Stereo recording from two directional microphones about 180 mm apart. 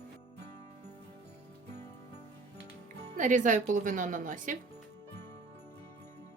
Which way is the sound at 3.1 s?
45° right (ahead or behind).